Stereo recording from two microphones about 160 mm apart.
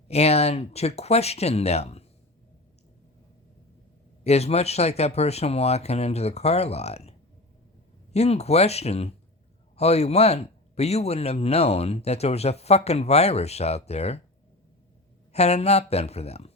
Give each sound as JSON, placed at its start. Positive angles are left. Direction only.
{"t": 0.1, "sound": "speech", "side_deg": 40}
{"t": 4.2, "sound": "speech", "side_deg": 40}
{"t": 8.1, "sound": "speech", "side_deg": 40}
{"t": 15.3, "sound": "speech", "side_deg": 40}